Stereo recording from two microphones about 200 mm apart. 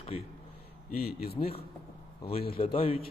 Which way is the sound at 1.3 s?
30° left (ahead or behind).